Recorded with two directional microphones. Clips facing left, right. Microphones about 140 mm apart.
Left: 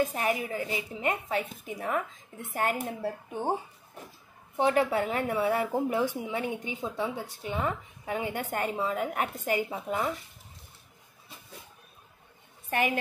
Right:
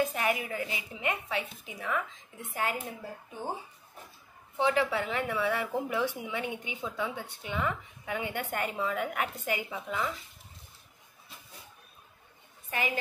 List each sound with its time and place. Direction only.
0.0 s a woman's voice: 35° left (ahead or behind); by 3.5 s 70° left (ahead or behind)
4.6 s a woman's voice: 45° left (ahead or behind)
12.6 s a sound: 55° left (ahead or behind)